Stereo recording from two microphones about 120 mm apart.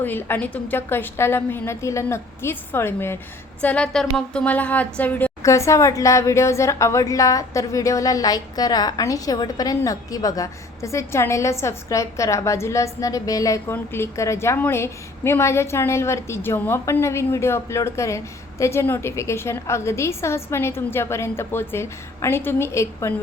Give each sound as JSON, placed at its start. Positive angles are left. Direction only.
{"t": 0.0, "sound": "a woman's voice", "side_deg": 15}
{"t": 3.6, "sound": "a woman's voice", "side_deg": 10}
{"t": 5.4, "sound": "a woman's voice", "side_deg": 25}